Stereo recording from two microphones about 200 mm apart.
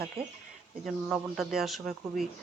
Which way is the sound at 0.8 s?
Centre (ahead or behind).